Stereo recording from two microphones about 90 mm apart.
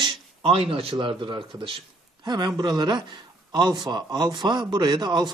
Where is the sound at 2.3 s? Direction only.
50° right (ahead or behind).